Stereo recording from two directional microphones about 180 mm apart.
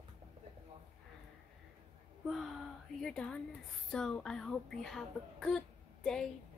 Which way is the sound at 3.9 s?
5° left (ahead or behind).